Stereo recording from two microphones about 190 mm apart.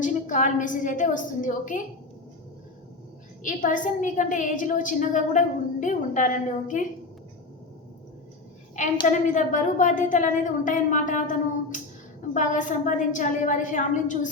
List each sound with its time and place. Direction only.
0.0 s a woman's voice: 40° left (ahead or behind)
3.4 s a woman's voice: 45° left (ahead or behind)
8.8 s a woman's voice: 40° left (ahead or behind)
12.3 s a woman's voice: 40° left (ahead or behind)